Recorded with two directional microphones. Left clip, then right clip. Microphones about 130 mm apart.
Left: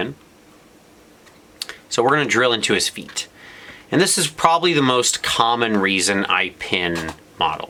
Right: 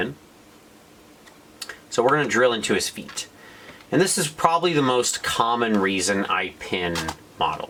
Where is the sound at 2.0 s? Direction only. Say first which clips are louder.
Left 2 dB; 40° left (ahead or behind).